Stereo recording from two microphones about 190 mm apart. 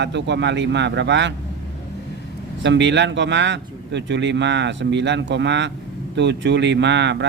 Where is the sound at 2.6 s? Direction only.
70° right (ahead or behind).